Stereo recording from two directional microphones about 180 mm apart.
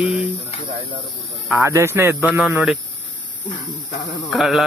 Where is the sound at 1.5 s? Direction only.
15° right (ahead or behind).